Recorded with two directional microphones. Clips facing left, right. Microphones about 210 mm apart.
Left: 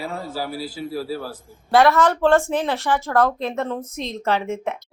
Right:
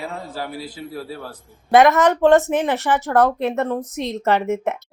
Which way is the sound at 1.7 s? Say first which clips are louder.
Right 2 dB; 20° right (ahead or behind).